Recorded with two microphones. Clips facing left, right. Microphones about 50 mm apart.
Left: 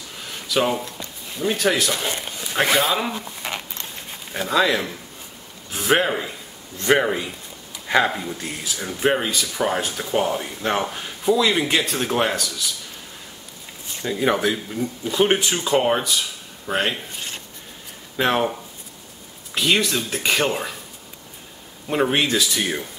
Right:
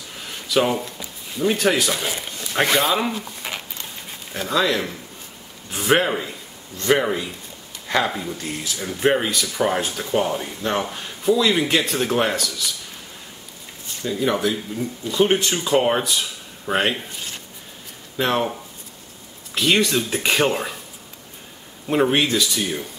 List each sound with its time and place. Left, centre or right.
0.3 s speech: centre
4.3 s speech: centre
14.0 s speech: centre
15.4 s speech: centre
18.1 s speech: centre
19.5 s speech: centre
21.8 s speech: centre